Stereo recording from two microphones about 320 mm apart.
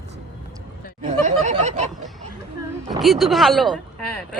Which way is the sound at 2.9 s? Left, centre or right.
Centre.